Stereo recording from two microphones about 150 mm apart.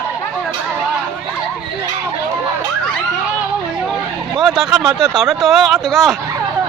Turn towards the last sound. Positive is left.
turn(degrees=0)  # may be behind; listen again after turning